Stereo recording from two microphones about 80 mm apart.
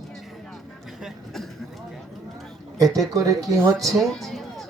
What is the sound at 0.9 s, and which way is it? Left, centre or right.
Speech, centre.